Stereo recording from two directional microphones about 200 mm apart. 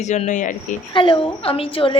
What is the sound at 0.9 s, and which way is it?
A woman's voice, 25° left (ahead or behind).